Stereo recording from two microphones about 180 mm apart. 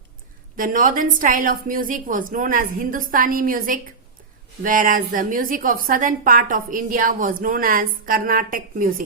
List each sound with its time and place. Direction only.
0.5 s a woman's voice: 50° right (ahead or behind)